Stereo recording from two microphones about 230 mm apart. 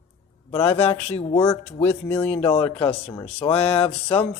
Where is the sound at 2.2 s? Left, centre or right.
Left.